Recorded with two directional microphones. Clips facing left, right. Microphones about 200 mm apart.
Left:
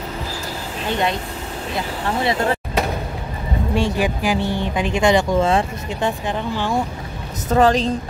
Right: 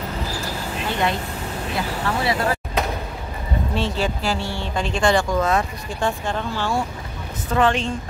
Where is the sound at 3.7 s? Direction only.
15° left (ahead or behind).